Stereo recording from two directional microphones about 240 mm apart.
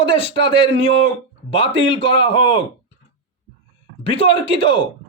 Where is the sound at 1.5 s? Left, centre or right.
Left.